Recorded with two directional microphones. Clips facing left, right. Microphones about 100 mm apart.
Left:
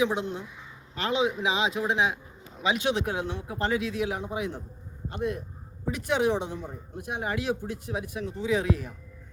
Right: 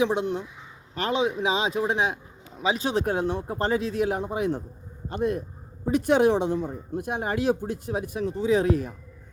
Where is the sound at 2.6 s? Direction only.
35° right (ahead or behind).